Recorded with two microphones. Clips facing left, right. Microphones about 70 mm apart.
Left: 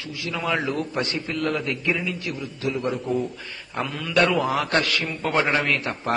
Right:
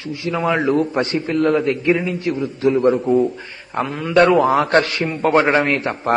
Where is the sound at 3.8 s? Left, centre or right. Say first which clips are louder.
Right 7 dB; right.